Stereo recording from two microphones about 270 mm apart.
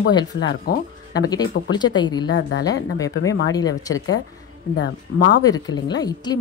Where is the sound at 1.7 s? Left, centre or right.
Centre.